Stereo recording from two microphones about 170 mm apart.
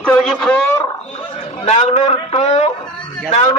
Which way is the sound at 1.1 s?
40° left (ahead or behind).